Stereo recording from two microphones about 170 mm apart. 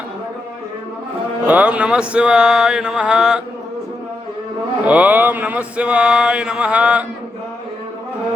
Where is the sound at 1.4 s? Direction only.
10° right (ahead or behind).